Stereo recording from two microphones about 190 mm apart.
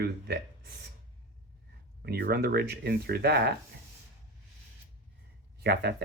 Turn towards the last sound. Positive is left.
turn(degrees=-60)  # may be behind; listen again after turning